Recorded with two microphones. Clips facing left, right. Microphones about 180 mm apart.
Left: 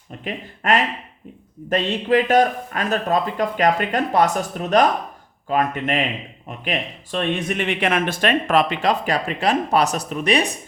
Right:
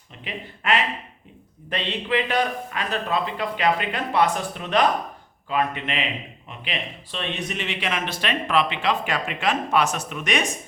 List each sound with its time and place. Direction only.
0.3 s speech: 45° left (ahead or behind)